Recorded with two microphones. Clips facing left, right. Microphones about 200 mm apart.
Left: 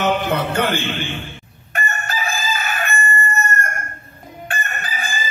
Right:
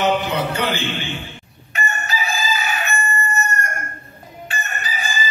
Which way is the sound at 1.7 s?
50° left (ahead or behind).